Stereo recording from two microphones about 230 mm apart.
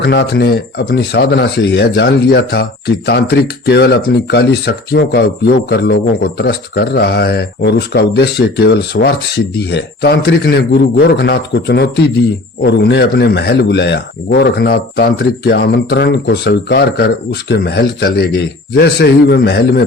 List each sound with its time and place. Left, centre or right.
0.0 s speech: left